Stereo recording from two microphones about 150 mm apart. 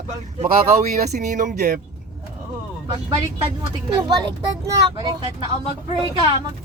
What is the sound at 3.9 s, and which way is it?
Speech, 25° right (ahead or behind).